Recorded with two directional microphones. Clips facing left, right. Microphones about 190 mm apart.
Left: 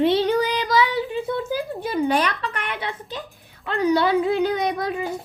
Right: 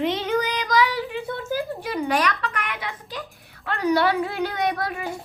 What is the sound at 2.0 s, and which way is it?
A woman's voice, 25° left (ahead or behind).